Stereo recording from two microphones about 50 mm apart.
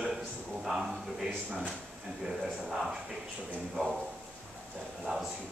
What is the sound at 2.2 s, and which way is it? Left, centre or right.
Speech, centre.